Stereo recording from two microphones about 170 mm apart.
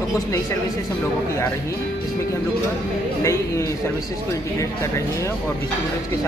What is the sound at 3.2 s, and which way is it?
Speech, 20° left (ahead or behind).